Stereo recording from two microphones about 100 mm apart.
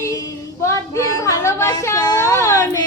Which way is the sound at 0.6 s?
30° left (ahead or behind).